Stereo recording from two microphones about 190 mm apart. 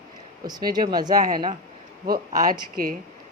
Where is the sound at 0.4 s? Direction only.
20° right (ahead or behind).